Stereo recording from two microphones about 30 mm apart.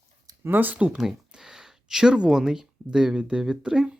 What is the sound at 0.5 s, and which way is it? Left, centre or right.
Speech, right.